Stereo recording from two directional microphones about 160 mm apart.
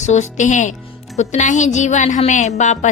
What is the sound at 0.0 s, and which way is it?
Speech, 45° left (ahead or behind).